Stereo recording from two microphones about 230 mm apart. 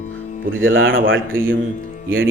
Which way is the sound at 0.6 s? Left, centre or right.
Right.